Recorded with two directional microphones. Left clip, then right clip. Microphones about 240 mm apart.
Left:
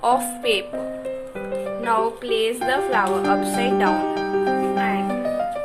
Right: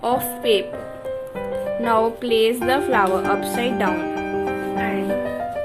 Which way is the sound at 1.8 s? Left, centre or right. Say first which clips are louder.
Right 2 dB; centre.